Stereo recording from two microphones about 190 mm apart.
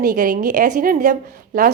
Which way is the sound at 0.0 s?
45° right (ahead or behind).